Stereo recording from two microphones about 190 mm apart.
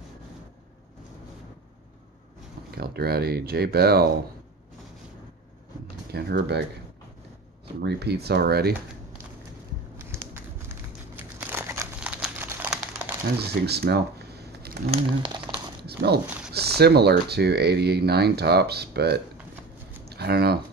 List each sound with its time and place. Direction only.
2.7 s speech: 55° right (ahead or behind)
6.1 s speech: 60° right (ahead or behind)
7.6 s speech: 60° right (ahead or behind)
10.0 s a sound: 10° right (ahead or behind)
11.1 s crumpling: 10° right (ahead or behind)
13.4 s a sound: 60° right (ahead or behind)
14.9 s speech: 25° right (ahead or behind)
15.9 s dog: 60° right (ahead or behind)
16.5 s speech: 55° right (ahead or behind)
20.1 s a sound: 55° right (ahead or behind)